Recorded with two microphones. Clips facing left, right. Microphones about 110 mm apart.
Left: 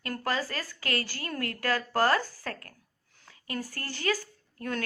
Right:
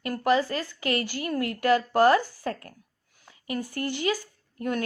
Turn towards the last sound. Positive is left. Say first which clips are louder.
# right 5 dB
turn(degrees=-20)  # may be behind; listen again after turning